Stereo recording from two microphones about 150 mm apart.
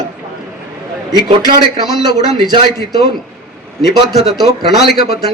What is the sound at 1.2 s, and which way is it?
Speech, 30° right (ahead or behind).